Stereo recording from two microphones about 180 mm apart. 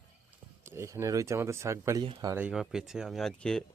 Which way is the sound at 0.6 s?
15° right (ahead or behind).